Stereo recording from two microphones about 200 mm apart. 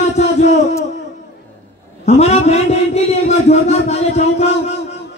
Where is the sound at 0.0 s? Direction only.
35° left (ahead or behind).